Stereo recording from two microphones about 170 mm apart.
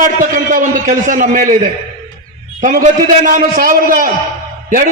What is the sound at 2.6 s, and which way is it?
A man's voice, 55° right (ahead or behind).